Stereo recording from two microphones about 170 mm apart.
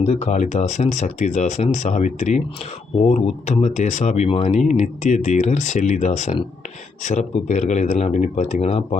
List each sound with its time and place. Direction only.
0.0 s speech: 40° left (ahead or behind)